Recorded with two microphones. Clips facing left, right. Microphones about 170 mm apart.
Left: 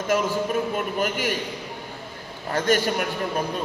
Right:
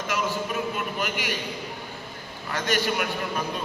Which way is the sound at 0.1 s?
50° left (ahead or behind).